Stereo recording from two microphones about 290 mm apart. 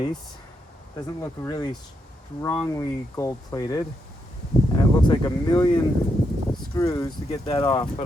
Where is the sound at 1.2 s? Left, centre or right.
Centre.